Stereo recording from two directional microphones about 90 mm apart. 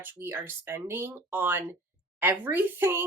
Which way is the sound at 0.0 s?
25° right (ahead or behind).